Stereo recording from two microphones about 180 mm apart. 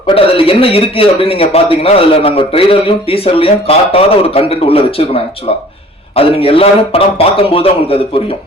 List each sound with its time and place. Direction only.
0.1 s speech: 30° left (ahead or behind)